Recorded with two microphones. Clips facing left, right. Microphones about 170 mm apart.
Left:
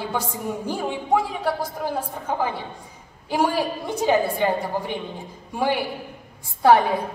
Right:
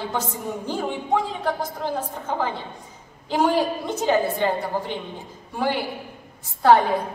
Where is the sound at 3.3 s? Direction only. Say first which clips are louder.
Right 2 dB; 10° left (ahead or behind).